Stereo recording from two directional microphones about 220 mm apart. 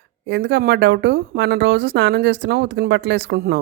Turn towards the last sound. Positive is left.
turn(degrees=-45)  # may be behind; listen again after turning